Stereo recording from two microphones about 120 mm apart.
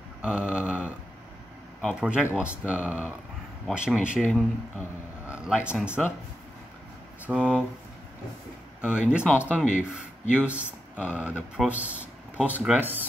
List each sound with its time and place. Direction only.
0.2 s a sound: 10° right (ahead or behind)
2.0 s speech: 10° right (ahead or behind)
4.2 s speech: 10° left (ahead or behind)
5.2 s a sound: 10° right (ahead or behind)
6.0 s speech: centre (ahead or behind)
7.2 s speech: 10° right (ahead or behind)
8.8 s speech: 10° right (ahead or behind)
9.2 s speech: 15° left (ahead or behind)
9.6 s speech: 10° right (ahead or behind)